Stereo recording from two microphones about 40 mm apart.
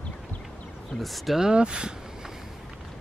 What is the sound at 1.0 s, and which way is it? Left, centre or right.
Speech, centre.